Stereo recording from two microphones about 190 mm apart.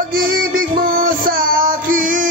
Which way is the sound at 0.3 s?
50° right (ahead or behind).